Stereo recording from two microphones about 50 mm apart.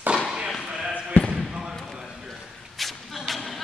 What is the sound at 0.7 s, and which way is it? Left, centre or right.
Basketball bounce, centre.